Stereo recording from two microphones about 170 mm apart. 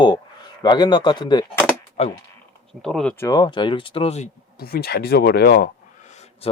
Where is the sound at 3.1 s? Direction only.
20° left (ahead or behind); by 4.3 s 40° left (ahead or behind).